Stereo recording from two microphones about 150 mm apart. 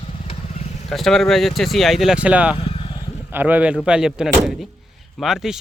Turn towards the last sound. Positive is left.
turn(degrees=-5)  # may be behind; listen again after turning